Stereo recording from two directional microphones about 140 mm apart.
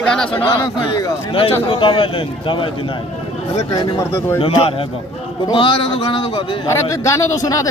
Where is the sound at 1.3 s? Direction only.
40° left (ahead or behind).